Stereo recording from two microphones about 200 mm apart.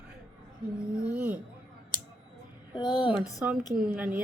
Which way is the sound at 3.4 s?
10° right (ahead or behind).